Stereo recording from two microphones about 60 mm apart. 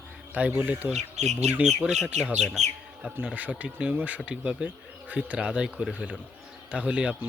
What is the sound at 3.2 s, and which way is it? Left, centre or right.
Speech, right.